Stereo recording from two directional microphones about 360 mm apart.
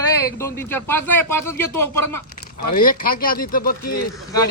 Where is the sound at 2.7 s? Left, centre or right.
Left.